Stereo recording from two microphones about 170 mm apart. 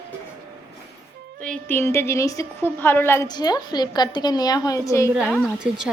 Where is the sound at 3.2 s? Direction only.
25° left (ahead or behind).